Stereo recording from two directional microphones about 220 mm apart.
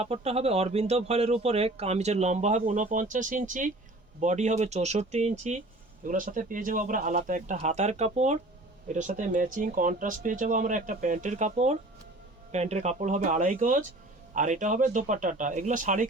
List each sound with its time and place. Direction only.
0.0 s speech: 25° right (ahead or behind)